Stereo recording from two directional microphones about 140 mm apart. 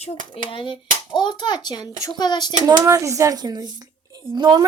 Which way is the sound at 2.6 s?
25° right (ahead or behind).